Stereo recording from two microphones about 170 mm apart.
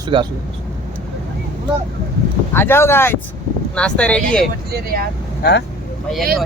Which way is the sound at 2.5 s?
15° left (ahead or behind).